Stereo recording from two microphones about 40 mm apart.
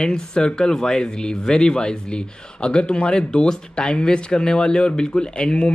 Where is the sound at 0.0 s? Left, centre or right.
Centre.